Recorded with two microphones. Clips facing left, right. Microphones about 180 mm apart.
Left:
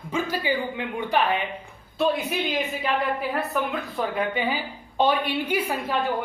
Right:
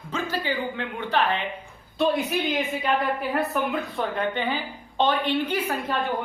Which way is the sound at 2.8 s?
Centre (ahead or behind).